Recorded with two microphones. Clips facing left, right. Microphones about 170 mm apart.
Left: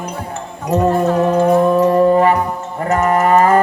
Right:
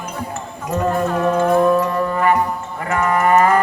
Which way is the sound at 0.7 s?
35° left (ahead or behind).